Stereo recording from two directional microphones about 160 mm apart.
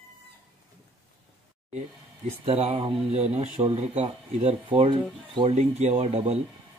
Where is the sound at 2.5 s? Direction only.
40° right (ahead or behind).